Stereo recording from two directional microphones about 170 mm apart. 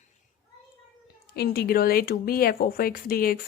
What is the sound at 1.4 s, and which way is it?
Speech, 65° left (ahead or behind).